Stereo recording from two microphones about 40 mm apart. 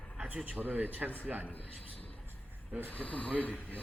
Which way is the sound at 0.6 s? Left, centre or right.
Right.